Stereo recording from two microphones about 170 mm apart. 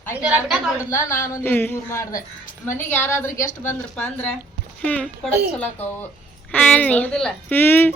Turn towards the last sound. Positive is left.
turn(degrees=15)  # may be behind; listen again after turning